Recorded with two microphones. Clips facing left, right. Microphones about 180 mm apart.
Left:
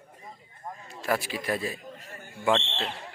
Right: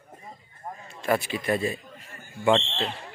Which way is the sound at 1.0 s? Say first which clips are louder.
Right 3 dB; 5° left (ahead or behind).